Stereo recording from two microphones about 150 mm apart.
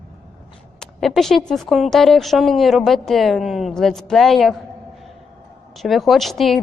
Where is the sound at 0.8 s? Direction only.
Centre (ahead or behind).